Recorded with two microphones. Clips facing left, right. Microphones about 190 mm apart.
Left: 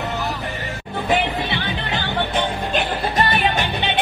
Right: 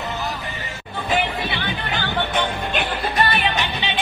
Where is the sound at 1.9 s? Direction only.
30° left (ahead or behind).